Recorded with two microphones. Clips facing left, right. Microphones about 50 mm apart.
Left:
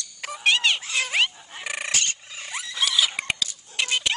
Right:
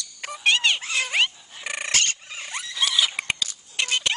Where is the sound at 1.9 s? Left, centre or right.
Right.